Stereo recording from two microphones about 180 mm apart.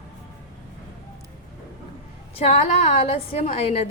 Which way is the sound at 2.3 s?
35° left (ahead or behind).